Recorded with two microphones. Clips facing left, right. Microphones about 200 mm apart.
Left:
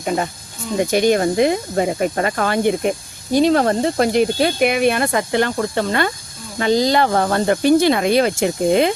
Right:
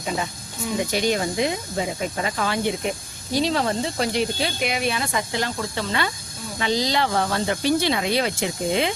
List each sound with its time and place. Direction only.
0.9 s speech: 50° left (ahead or behind)